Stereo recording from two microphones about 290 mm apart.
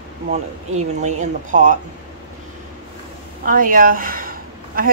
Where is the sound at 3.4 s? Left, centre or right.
Right.